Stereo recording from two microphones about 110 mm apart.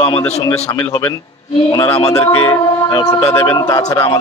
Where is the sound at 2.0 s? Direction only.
30° left (ahead or behind).